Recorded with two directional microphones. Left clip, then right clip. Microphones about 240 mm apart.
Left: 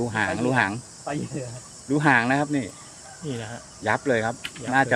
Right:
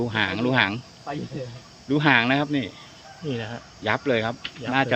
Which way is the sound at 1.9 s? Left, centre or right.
Centre.